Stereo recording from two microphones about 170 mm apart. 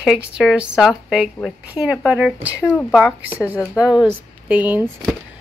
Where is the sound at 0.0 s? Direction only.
Centre (ahead or behind).